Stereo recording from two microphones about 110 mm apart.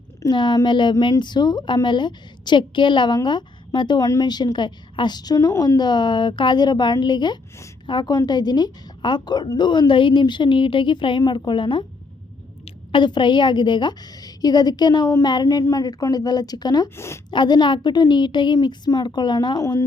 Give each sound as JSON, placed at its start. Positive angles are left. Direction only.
{"t": 0.3, "sound": "a woman's voice", "side_deg": 45}
{"t": 16.9, "sound": "a woman's voice", "side_deg": 25}
{"t": 17.3, "sound": "a woman's voice", "side_deg": 45}